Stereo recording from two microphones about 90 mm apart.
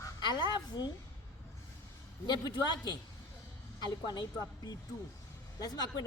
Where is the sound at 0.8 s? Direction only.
55° left (ahead or behind).